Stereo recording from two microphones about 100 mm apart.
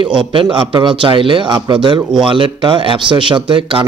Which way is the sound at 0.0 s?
50° right (ahead or behind).